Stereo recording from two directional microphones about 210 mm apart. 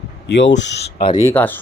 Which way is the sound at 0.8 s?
25° left (ahead or behind).